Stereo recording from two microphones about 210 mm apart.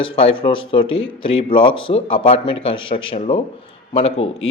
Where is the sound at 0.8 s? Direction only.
70° left (ahead or behind).